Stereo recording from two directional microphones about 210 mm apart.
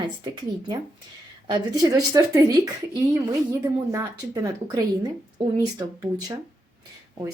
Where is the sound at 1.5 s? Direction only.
20° right (ahead or behind).